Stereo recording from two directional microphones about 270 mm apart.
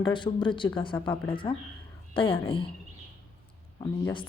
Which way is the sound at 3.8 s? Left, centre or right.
Centre.